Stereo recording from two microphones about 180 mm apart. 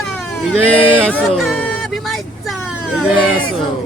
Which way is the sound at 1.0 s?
5° left (ahead or behind).